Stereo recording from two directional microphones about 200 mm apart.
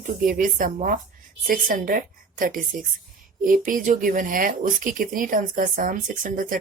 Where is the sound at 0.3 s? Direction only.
45° right (ahead or behind).